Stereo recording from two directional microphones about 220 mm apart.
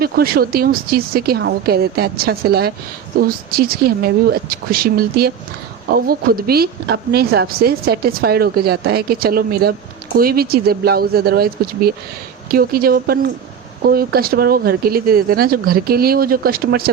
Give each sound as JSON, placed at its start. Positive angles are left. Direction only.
{"t": 0.0, "sound": "a woman's voice", "side_deg": -45}